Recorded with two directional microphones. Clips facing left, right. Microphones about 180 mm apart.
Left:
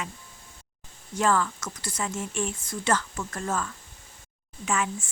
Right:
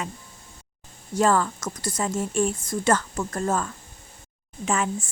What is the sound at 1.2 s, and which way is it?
Speech, 40° right (ahead or behind).